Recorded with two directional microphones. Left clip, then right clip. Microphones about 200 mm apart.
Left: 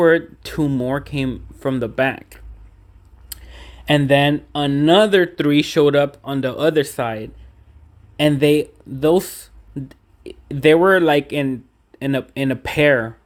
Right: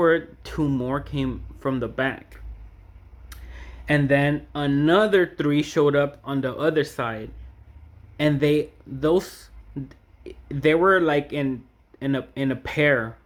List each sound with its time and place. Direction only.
0.0 s speech: 40° left (ahead or behind)
3.5 s speech: 40° left (ahead or behind)